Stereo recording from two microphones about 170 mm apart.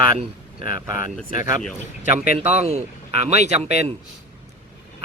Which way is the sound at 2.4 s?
40° right (ahead or behind).